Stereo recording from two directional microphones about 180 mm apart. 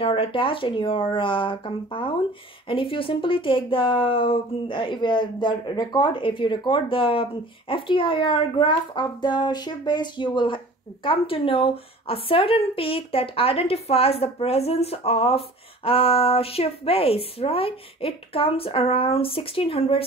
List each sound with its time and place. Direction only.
0.0 s speech: 30° left (ahead or behind)